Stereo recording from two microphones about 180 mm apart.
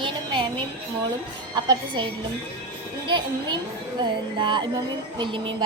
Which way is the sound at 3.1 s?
25° right (ahead or behind).